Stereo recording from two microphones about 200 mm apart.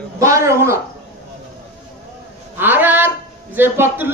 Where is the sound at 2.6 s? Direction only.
10° right (ahead or behind).